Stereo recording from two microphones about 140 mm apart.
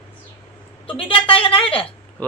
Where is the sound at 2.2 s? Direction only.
10° left (ahead or behind).